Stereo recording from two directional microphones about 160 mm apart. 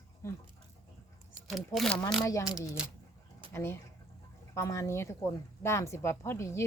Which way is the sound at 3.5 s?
15° left (ahead or behind).